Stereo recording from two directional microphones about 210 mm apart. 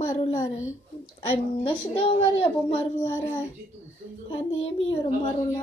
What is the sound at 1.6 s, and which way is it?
A woman's voice, 25° left (ahead or behind).